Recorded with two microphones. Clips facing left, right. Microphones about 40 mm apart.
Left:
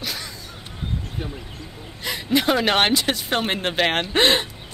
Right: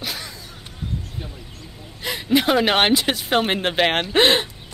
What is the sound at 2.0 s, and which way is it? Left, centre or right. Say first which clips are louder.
Speech: right 2 dB; centre.